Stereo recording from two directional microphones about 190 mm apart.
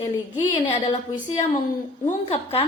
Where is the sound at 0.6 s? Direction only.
35° left (ahead or behind).